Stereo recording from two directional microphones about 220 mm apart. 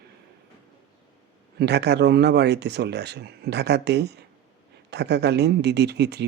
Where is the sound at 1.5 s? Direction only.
50° right (ahead or behind).